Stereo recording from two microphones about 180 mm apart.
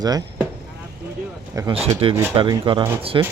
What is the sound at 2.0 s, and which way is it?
Speech, 30° right (ahead or behind).